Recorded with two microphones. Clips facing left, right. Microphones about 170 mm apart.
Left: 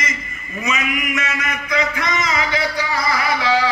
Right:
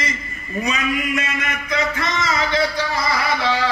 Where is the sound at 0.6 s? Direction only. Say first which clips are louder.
Right 1 dB; 35° right (ahead or behind).